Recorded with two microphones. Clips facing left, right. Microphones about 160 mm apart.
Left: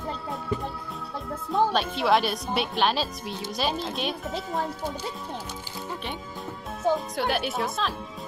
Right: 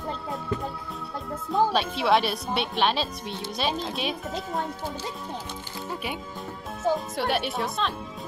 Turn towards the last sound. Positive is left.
turn(degrees=0)  # may be behind; listen again after turning